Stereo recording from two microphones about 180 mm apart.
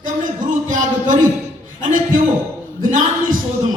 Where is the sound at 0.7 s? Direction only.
45° right (ahead or behind).